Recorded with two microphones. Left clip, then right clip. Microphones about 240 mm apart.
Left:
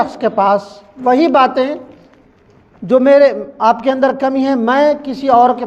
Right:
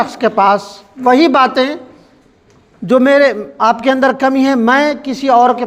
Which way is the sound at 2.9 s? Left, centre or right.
Right.